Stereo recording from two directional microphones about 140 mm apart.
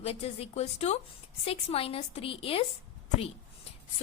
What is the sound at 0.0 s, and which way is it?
A woman's voice, 45° left (ahead or behind).